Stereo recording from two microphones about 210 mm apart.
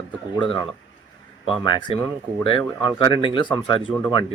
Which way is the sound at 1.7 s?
20° left (ahead or behind).